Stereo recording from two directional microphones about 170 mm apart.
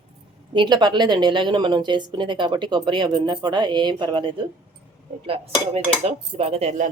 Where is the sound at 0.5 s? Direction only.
25° right (ahead or behind).